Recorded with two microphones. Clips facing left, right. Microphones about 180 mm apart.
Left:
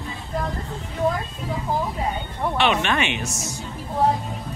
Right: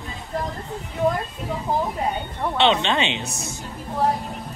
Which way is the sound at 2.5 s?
25° right (ahead or behind).